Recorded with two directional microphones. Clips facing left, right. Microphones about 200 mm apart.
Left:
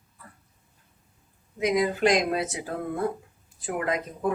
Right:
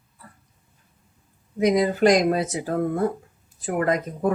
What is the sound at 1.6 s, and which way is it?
Speech, 40° right (ahead or behind).